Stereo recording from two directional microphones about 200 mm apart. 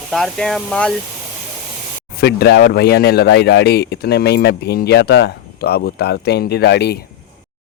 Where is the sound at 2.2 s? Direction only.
55° left (ahead or behind).